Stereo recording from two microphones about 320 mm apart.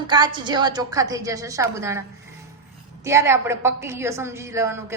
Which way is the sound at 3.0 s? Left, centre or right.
Centre.